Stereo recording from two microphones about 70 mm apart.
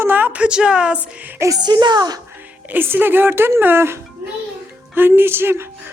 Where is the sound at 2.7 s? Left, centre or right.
Right.